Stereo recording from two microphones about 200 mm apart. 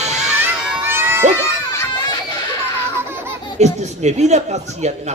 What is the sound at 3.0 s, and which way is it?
Baby laughter, 10° right (ahead or behind).